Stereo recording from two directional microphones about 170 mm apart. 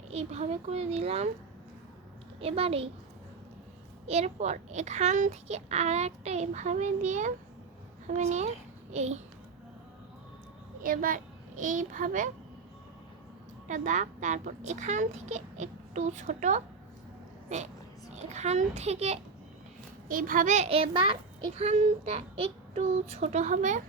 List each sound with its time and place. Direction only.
0.1 s a child's voice: 40° right (ahead or behind)
2.4 s a child's voice: 35° right (ahead or behind)
4.0 s a child's voice: 40° right (ahead or behind)
10.8 s a child's voice: 55° right (ahead or behind)
13.7 s a child's voice: 45° right (ahead or behind)
20.1 s a child's voice: 55° right (ahead or behind)